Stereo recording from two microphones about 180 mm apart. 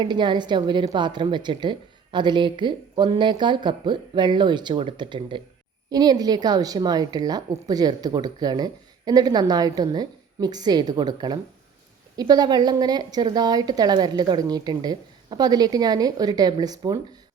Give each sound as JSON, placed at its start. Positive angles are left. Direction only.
{"t": 0.0, "sound": "a woman's voice", "side_deg": -25}